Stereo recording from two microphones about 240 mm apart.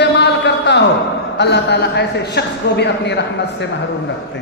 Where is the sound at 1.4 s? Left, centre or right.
Left.